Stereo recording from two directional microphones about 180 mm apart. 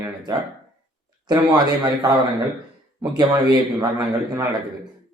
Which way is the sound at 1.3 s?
25° right (ahead or behind).